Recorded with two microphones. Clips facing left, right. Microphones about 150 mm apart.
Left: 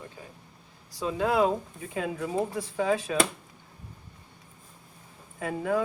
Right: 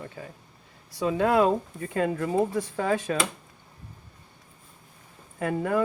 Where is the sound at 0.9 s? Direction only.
65° right (ahead or behind).